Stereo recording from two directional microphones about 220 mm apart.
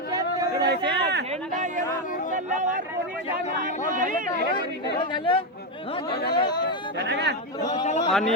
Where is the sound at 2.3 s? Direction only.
35° right (ahead or behind).